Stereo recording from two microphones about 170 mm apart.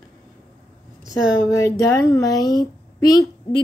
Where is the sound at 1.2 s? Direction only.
20° left (ahead or behind).